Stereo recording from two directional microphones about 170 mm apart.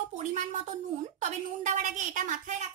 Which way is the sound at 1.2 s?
45° right (ahead or behind).